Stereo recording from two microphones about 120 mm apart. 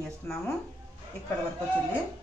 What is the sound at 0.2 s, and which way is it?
Speech, 15° left (ahead or behind).